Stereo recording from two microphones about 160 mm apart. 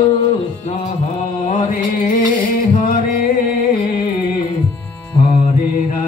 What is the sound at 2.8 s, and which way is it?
Music, 55° left (ahead or behind).